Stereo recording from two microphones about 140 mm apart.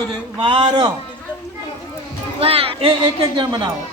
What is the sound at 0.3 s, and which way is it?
Speech, 35° right (ahead or behind).